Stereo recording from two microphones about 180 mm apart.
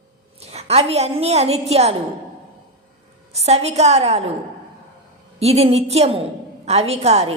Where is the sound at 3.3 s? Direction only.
35° right (ahead or behind).